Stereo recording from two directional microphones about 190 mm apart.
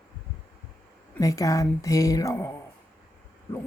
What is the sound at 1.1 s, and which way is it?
A woman's voice, 15° left (ahead or behind).